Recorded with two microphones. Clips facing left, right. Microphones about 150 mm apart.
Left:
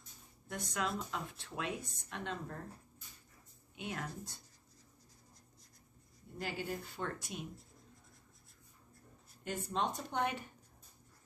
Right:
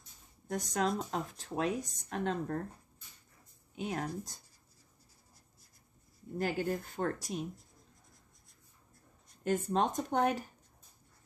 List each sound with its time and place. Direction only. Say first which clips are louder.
0.5 s speech: right 6 dB; 40° right (ahead or behind)
3.7 s speech: right 6 dB; 40° right (ahead or behind)
6.3 s speech: right 7 dB; 50° right (ahead or behind)
9.4 s speech: right 7 dB; 45° right (ahead or behind)